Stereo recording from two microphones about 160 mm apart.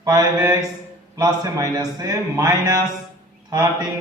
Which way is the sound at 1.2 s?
20° right (ahead or behind).